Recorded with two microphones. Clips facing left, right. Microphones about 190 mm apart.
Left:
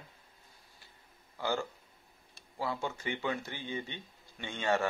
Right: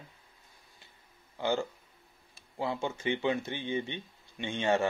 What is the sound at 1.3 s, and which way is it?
Speech, 20° right (ahead or behind).